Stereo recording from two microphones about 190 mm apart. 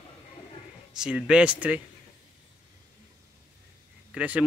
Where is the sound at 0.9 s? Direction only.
5° right (ahead or behind).